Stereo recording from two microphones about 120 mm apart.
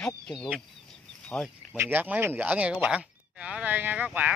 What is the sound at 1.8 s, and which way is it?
Speech, 15° right (ahead or behind).